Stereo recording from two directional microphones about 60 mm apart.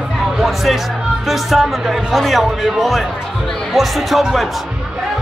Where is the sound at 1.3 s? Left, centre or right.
Centre.